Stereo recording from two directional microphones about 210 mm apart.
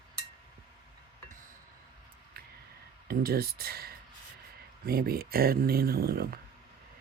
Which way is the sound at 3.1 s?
45° right (ahead or behind).